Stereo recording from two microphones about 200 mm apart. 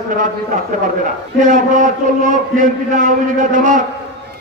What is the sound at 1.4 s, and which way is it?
A man's voice, 40° right (ahead or behind).